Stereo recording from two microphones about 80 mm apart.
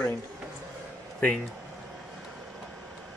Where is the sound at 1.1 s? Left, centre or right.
Centre.